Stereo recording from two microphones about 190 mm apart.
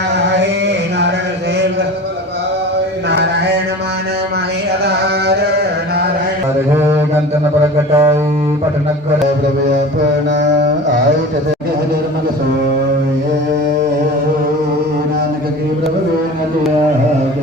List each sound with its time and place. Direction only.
4.9 s carnatic music: 60° right (ahead or behind)
7.9 s music: 15° right (ahead or behind)